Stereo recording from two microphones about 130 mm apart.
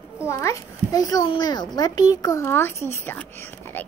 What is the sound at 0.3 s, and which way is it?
A child's voice, 25° left (ahead or behind).